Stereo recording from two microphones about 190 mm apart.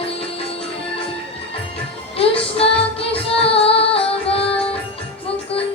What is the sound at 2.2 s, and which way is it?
Music, 30° left (ahead or behind).